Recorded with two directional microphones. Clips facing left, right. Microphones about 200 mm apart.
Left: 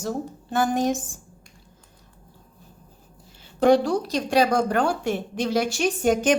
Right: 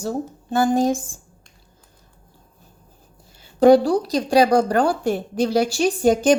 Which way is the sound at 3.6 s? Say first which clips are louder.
Right 5 dB; 35° right (ahead or behind).